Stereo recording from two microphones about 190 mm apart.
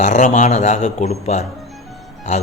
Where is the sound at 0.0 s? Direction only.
40° left (ahead or behind).